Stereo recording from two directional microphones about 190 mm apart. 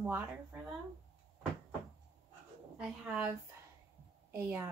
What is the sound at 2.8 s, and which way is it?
A woman's voice, 10° right (ahead or behind).